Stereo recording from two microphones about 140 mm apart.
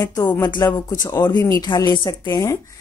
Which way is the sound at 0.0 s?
25° left (ahead or behind).